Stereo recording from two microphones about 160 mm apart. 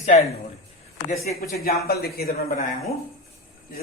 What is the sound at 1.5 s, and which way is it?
A man's voice, 75° left (ahead or behind).